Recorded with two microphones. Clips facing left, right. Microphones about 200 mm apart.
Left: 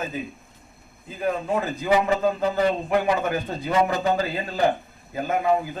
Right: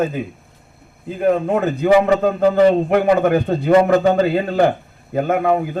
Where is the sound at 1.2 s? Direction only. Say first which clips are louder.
Right 8 dB; 60° right (ahead or behind).